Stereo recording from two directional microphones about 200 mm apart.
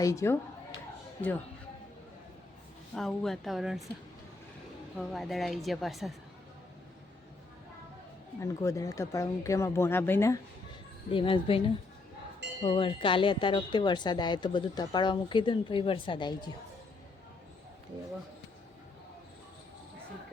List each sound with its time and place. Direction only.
0.0 s speech: 15° left (ahead or behind)
2.9 s a woman's voice: centre (ahead or behind)
4.9 s a woman's voice: centre (ahead or behind)
8.4 s speech: 15° left (ahead or behind)
11.1 s speech: 25° left (ahead or behind)
12.6 s speech: 25° left (ahead or behind)